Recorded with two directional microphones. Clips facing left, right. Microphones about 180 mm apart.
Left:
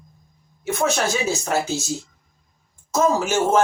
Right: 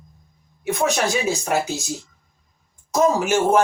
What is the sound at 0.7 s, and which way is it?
Speech, 15° right (ahead or behind).